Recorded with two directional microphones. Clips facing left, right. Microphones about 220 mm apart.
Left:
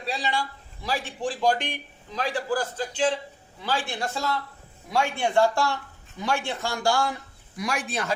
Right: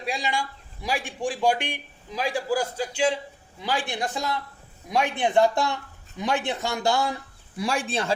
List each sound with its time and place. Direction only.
0.0 s a man's voice: 10° right (ahead or behind); by 8.1 s 30° right (ahead or behind)